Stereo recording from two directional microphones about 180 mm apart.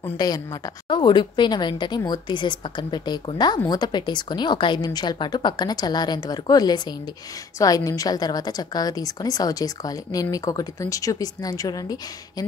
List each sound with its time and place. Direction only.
0.2 s a woman's voice: 20° left (ahead or behind)